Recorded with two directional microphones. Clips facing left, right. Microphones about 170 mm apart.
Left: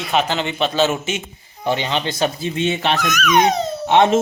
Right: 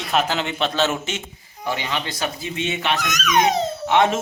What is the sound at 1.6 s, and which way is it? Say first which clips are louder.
Speech: left 5 dB; 25° left (ahead or behind).